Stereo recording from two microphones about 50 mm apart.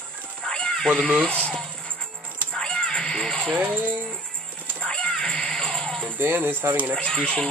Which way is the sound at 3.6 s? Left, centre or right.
Right.